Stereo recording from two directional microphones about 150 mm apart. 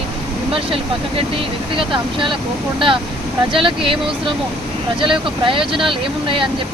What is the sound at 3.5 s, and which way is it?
Speech, 35° right (ahead or behind).